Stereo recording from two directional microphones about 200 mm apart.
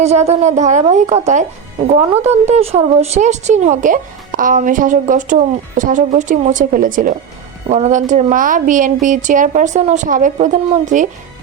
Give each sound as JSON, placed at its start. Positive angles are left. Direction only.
{"t": 0.0, "sound": "speech", "side_deg": -35}